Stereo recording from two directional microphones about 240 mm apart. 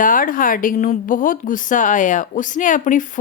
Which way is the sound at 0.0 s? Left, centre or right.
Left.